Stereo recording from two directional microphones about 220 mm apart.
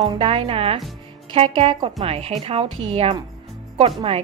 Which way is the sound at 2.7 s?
65° right (ahead or behind).